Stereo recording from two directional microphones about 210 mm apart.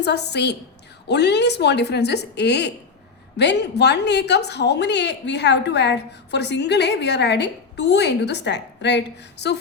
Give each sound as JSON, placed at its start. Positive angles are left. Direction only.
{"t": 0.0, "sound": "a woman's voice", "side_deg": 55}